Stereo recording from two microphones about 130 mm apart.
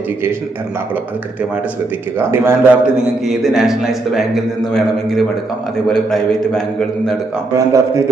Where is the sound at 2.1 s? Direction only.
20° right (ahead or behind).